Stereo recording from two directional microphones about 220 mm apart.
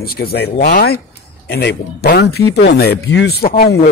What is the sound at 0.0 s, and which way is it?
A man's voice, 45° left (ahead or behind).